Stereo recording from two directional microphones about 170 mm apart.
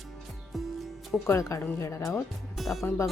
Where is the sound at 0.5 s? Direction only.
Centre (ahead or behind).